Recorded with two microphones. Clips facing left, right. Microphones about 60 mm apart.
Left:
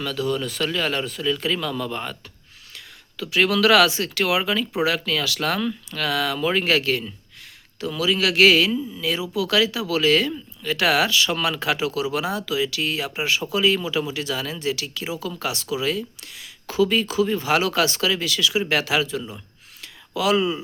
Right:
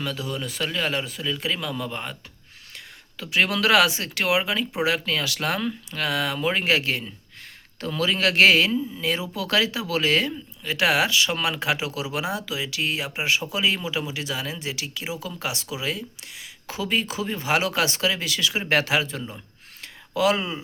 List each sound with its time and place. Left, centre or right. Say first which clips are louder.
0.0 s a man's voice: left 5 dB; centre
7.8 s speech: left 2 dB; right
19.8 s a sound: right 2 dB; right